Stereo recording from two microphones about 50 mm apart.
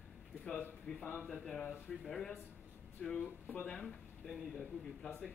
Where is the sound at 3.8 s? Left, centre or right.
Centre.